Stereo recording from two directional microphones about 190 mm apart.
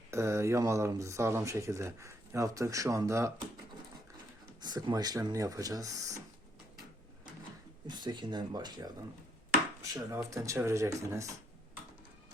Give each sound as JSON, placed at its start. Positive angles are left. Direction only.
{"t": 0.1, "sound": "speech", "side_deg": -15}
{"t": 4.6, "sound": "speech", "side_deg": -20}
{"t": 7.9, "sound": "speech", "side_deg": -20}
{"t": 9.9, "sound": "speech", "side_deg": -15}